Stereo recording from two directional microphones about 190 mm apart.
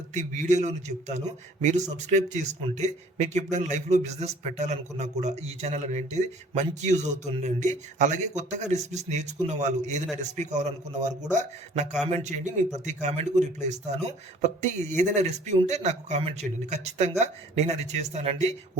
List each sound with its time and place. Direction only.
0.1 s a man's voice: 40° right (ahead or behind)